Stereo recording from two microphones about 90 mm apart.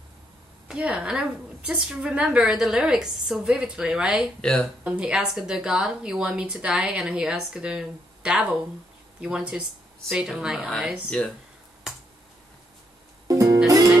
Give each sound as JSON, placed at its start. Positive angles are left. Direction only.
{"t": 0.7, "sound": "a woman's voice", "side_deg": -10}
{"t": 4.4, "sound": "speech", "side_deg": 10}
{"t": 4.8, "sound": "a woman's voice", "side_deg": -10}
{"t": 11.1, "sound": "speech", "side_deg": 10}
{"t": 13.3, "sound": "music", "side_deg": -40}